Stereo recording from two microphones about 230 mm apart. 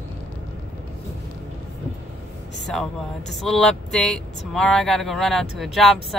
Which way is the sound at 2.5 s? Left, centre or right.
Centre.